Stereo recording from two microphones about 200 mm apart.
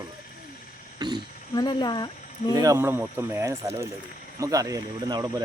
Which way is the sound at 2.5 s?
15° right (ahead or behind).